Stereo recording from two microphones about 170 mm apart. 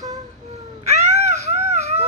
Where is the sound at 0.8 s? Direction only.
40° right (ahead or behind).